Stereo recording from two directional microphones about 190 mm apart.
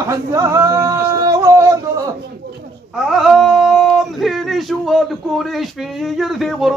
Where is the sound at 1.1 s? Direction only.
15° right (ahead or behind).